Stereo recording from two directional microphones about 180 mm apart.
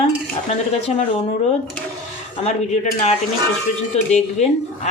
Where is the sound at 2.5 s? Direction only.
40° left (ahead or behind).